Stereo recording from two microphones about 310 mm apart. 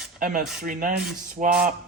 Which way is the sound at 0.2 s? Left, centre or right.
Right.